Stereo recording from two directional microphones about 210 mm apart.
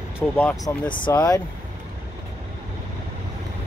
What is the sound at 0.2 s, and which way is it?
Speech, 5° left (ahead or behind).